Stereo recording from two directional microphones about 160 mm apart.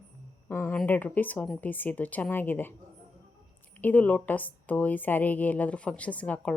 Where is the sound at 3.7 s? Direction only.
10° left (ahead or behind).